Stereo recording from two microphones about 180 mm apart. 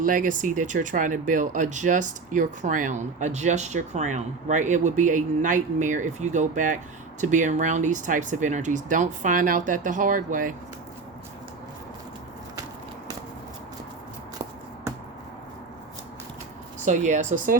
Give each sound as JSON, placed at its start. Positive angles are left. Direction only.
{"t": 0.0, "sound": "speech", "side_deg": -45}
{"t": 16.8, "sound": "speech", "side_deg": -45}